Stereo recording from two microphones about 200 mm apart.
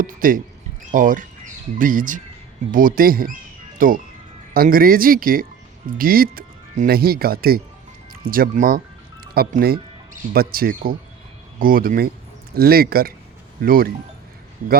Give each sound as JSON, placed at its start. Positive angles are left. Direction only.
{"t": 0.0, "sound": "speech", "side_deg": -45}